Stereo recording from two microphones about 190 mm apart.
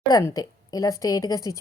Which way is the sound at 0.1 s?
15° left (ahead or behind).